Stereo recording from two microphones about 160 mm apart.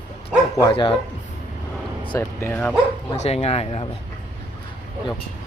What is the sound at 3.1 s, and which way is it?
Speech, 40° left (ahead or behind).